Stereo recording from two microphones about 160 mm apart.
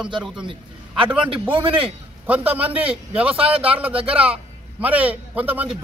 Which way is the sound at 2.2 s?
10° right (ahead or behind).